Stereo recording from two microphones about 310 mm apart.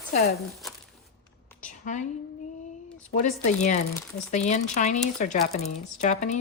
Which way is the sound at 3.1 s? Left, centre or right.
Left.